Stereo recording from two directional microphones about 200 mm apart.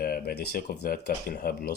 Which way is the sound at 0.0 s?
50° left (ahead or behind).